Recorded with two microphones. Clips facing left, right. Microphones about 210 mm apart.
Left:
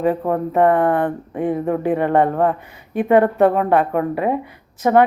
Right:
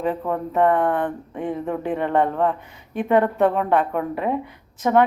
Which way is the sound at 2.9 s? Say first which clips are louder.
Left 4 dB; 5° left (ahead or behind).